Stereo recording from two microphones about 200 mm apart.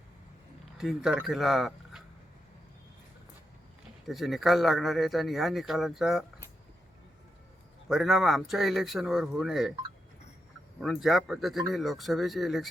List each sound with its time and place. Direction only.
0.8 s speech: centre (ahead or behind)
4.0 s speech: centre (ahead or behind)
7.9 s speech: centre (ahead or behind)
10.8 s speech: centre (ahead or behind)